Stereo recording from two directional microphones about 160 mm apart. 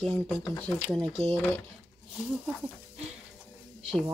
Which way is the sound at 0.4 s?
5° left (ahead or behind).